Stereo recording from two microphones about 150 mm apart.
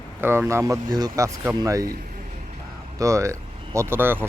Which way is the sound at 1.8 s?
75° right (ahead or behind).